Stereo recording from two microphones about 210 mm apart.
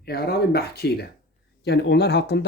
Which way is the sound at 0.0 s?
45° left (ahead or behind).